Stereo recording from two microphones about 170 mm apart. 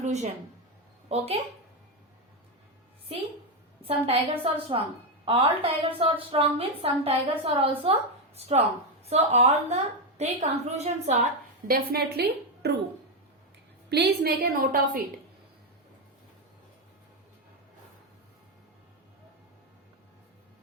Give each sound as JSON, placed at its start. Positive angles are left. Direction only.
{"t": 0.0, "sound": "a woman's voice", "side_deg": -45}
{"t": 3.8, "sound": "a woman's voice", "side_deg": -35}
{"t": 11.7, "sound": "a woman's voice", "side_deg": -65}
{"t": 13.9, "sound": "a woman's voice", "side_deg": -70}